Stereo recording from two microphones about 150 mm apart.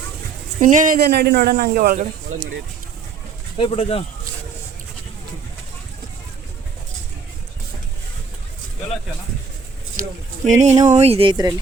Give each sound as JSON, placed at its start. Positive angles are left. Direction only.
{"t": 0.6, "sound": "speech", "side_deg": -60}
{"t": 3.6, "sound": "speech", "side_deg": 40}
{"t": 10.0, "sound": "speech", "side_deg": -55}